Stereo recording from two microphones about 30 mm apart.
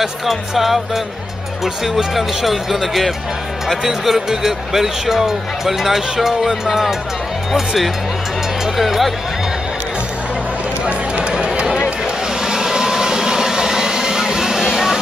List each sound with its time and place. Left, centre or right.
0.0 s speech: centre
11.3 s chatter: right
12.4 s vehicle: right